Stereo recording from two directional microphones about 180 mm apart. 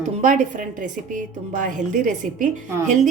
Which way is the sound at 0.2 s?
45° right (ahead or behind).